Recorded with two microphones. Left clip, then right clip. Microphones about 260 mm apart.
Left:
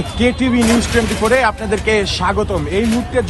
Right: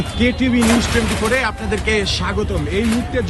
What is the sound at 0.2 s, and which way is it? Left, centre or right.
A man's voice, centre.